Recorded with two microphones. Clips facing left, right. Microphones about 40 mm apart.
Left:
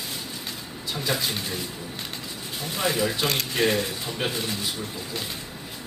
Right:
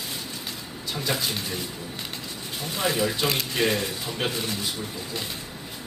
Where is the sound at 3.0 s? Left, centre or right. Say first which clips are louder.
Even; centre.